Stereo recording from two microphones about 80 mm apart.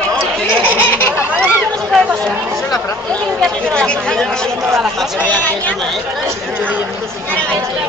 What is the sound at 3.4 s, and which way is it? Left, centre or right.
Speech, centre.